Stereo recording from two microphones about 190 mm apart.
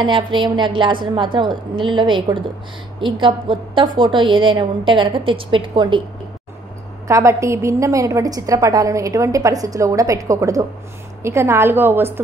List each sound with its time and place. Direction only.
0.0 s a woman's voice: 25° right (ahead or behind)
7.1 s a woman's voice: 15° right (ahead or behind)